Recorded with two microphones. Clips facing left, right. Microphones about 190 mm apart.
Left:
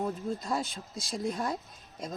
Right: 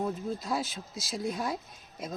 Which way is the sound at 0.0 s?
Centre (ahead or behind).